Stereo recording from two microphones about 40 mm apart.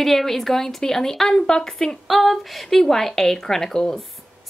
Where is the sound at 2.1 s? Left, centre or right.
Centre.